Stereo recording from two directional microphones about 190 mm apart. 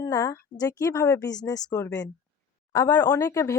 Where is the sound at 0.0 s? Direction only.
20° left (ahead or behind).